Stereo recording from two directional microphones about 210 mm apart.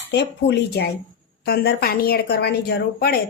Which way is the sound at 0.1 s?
55° left (ahead or behind).